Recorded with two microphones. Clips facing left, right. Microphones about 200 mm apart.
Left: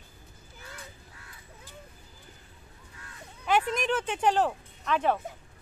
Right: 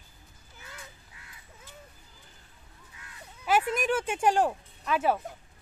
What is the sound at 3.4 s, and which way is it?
Speech, 5° right (ahead or behind).